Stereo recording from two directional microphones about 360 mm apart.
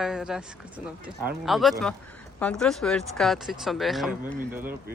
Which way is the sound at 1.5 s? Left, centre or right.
Centre.